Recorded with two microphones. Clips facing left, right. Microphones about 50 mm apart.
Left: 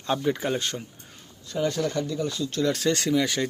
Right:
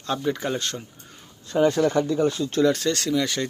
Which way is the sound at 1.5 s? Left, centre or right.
Right.